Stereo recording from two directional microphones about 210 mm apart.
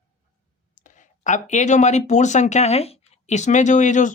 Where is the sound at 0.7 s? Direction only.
35° left (ahead or behind).